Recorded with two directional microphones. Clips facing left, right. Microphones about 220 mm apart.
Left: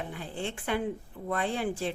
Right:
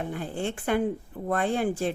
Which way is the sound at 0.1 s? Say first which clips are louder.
Right 5 dB; 50° right (ahead or behind).